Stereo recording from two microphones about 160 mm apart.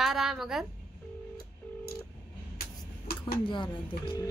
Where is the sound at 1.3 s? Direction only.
70° left (ahead or behind).